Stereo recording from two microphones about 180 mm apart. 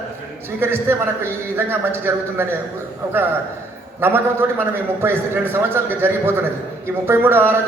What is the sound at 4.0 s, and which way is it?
A man's voice, 10° right (ahead or behind).